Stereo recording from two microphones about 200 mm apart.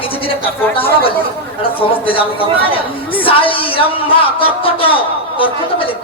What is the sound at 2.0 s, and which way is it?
A woman's voice, 25° left (ahead or behind).